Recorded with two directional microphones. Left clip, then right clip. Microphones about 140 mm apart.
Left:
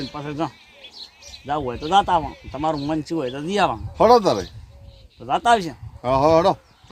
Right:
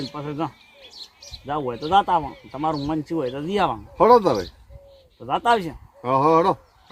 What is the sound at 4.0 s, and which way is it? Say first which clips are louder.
Speech: even; 25° left (ahead or behind).